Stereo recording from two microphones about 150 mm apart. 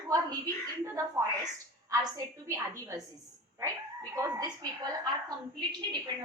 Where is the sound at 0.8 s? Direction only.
20° right (ahead or behind).